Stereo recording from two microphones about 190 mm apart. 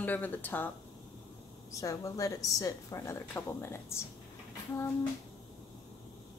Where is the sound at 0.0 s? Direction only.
10° left (ahead or behind).